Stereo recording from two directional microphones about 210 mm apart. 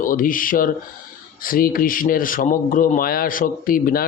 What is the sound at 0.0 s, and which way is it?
Speech, 40° left (ahead or behind).